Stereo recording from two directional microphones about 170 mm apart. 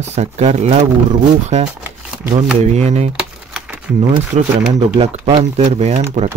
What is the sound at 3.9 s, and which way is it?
Speech, 5° right (ahead or behind).